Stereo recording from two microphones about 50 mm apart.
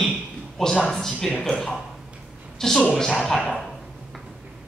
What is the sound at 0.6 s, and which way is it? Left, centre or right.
Speech, centre.